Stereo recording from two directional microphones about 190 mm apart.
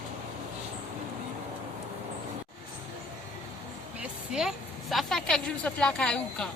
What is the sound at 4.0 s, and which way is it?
A woman's voice, 5° right (ahead or behind).